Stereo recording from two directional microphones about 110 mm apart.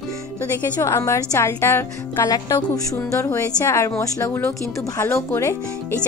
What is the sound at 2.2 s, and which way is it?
Speech, 35° left (ahead or behind).